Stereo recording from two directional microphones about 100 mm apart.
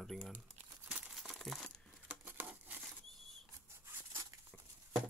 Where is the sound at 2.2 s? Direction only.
15° right (ahead or behind).